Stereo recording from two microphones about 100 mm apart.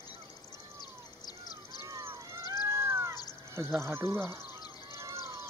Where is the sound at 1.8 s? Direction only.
30° right (ahead or behind).